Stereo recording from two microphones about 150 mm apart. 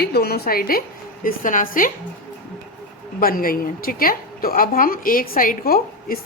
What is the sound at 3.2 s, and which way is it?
A woman's voice, 70° left (ahead or behind).